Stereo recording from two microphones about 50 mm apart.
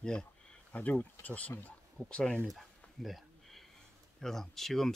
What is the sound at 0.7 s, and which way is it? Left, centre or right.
Speech, left.